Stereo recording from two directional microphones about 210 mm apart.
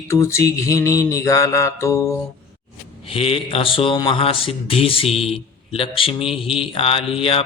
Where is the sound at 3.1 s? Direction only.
25° left (ahead or behind).